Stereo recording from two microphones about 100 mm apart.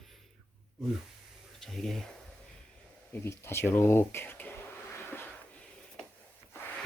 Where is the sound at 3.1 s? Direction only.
25° left (ahead or behind).